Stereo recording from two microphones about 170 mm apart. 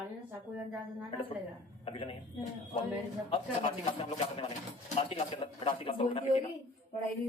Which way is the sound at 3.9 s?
35° left (ahead or behind).